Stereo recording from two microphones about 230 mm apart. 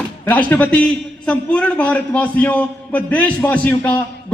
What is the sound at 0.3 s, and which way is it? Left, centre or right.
A man's voice, centre.